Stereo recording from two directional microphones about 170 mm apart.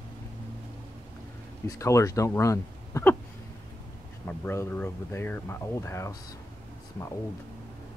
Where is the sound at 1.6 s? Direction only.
20° left (ahead or behind).